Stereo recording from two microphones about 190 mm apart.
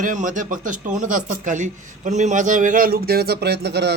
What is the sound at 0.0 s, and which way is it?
A man's voice, 40° right (ahead or behind).